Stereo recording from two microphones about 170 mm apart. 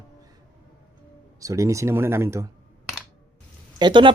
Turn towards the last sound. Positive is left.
turn(degrees=-25)  # may be behind; listen again after turning